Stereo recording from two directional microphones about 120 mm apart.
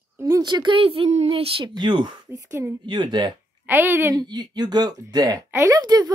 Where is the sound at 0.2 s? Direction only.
30° right (ahead or behind).